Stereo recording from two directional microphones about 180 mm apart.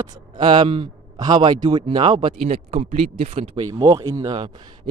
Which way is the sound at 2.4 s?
40° right (ahead or behind).